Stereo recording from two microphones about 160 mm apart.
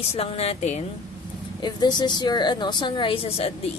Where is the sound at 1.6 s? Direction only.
25° left (ahead or behind).